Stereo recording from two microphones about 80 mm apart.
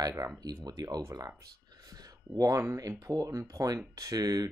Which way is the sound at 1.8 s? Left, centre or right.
Right.